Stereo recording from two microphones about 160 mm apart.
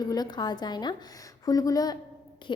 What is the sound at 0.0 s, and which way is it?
A woman's voice, 25° left (ahead or behind).